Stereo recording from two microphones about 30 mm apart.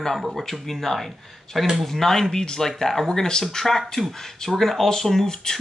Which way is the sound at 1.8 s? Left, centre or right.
Centre.